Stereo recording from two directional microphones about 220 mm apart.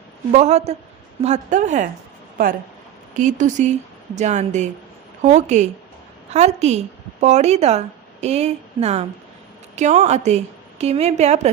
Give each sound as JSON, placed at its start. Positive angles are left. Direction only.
{"t": 0.3, "sound": "speech", "side_deg": -30}
{"t": 3.2, "sound": "a woman's voice", "side_deg": -35}